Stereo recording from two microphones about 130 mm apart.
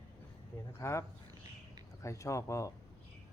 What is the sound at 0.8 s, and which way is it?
Speech, 20° left (ahead or behind).